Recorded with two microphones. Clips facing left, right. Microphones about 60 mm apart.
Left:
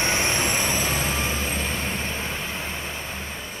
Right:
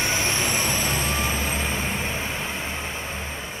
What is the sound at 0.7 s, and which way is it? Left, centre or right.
Vehicle, centre.